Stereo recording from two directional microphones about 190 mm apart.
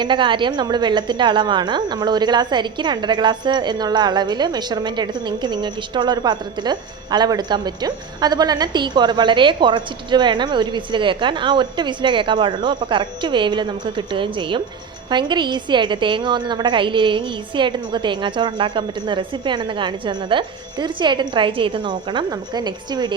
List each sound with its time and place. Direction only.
0.0 s a woman's voice: 25° right (ahead or behind)